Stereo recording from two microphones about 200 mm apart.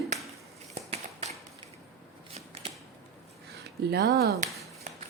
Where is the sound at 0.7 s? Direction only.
35° right (ahead or behind).